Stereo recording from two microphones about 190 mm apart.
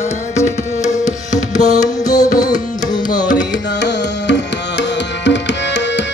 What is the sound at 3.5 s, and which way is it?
Music, 65° left (ahead or behind).